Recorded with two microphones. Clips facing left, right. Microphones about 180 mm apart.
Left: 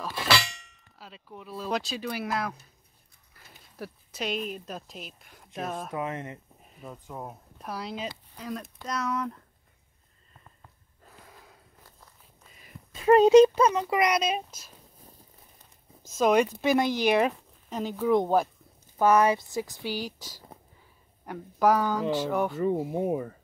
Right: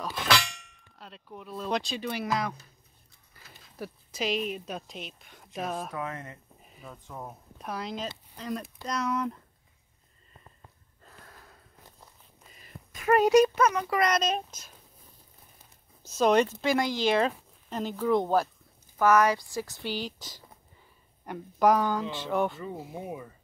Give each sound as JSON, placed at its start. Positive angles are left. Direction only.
{"t": 0.0, "sound": "clang", "side_deg": 5}
{"t": 0.9, "sound": "speech", "side_deg": 0}
{"t": 3.4, "sound": "a sound", "side_deg": 0}
{"t": 3.7, "sound": "speech", "side_deg": 0}
{"t": 5.9, "sound": "speech", "side_deg": 20}
{"t": 6.9, "sound": "speech", "side_deg": 10}
{"t": 11.1, "sound": "a sound", "side_deg": 10}
{"t": 12.9, "sound": "speech", "side_deg": 25}
{"t": 13.8, "sound": "speech", "side_deg": 15}
{"t": 16.2, "sound": "speech", "side_deg": 10}
{"t": 17.3, "sound": "speech", "side_deg": 5}
{"t": 18.9, "sound": "speech", "side_deg": 25}
{"t": 22.6, "sound": "speech", "side_deg": 50}